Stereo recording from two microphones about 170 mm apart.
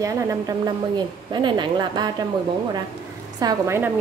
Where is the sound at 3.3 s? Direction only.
20° right (ahead or behind).